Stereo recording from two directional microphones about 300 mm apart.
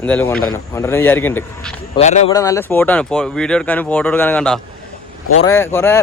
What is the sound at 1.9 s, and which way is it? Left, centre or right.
Speech, left.